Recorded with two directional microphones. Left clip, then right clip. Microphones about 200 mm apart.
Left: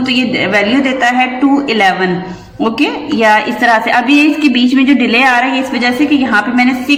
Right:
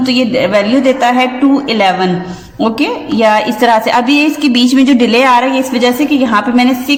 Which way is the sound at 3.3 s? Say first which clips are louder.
Even; 45° right (ahead or behind).